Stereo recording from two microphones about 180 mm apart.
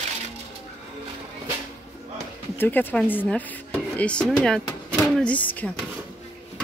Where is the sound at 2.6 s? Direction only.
10° left (ahead or behind).